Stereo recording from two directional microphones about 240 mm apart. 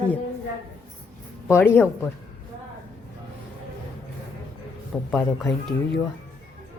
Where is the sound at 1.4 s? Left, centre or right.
Centre.